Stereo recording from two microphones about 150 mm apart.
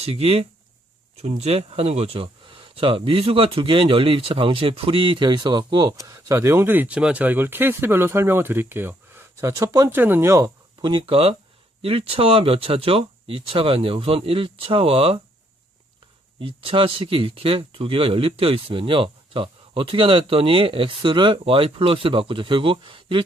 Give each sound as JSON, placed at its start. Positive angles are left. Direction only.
{"t": 0.0, "sound": "speech", "side_deg": -40}
{"t": 16.4, "sound": "speech", "side_deg": -35}